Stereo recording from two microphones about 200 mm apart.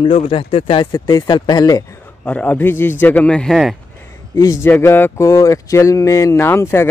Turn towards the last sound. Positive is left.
turn(degrees=10)  # may be behind; listen again after turning